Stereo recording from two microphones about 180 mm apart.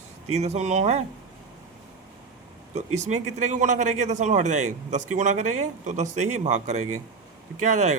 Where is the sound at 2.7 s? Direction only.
40° right (ahead or behind).